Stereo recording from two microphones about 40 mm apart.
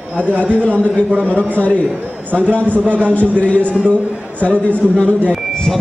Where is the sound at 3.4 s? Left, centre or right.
Left.